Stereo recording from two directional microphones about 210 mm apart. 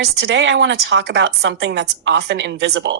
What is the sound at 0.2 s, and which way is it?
A woman's voice, 65° right (ahead or behind).